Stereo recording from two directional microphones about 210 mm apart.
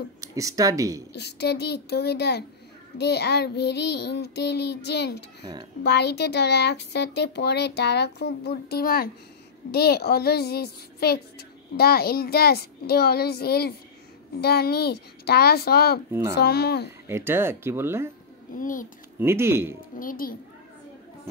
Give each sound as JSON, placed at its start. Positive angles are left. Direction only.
{"t": 0.2, "sound": "speech", "side_deg": -15}
{"t": 1.1, "sound": "a child's voice", "side_deg": 50}
{"t": 5.4, "sound": "speech", "side_deg": -20}
{"t": 5.9, "sound": "a child's voice", "side_deg": 50}
{"t": 16.1, "sound": "speech", "side_deg": -15}
{"t": 16.3, "sound": "a child's voice", "side_deg": 50}
{"t": 17.1, "sound": "speech", "side_deg": -10}
{"t": 18.6, "sound": "a child's voice", "side_deg": 40}
{"t": 19.1, "sound": "speech", "side_deg": -10}
{"t": 20.0, "sound": "a child's voice", "side_deg": 40}